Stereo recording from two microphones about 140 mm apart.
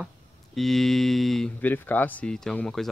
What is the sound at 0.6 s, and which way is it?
Speech, centre (ahead or behind).